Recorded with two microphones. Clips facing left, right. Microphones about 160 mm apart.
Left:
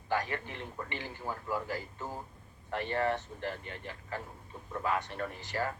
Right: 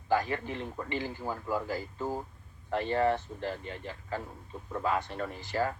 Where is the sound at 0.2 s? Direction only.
20° right (ahead or behind).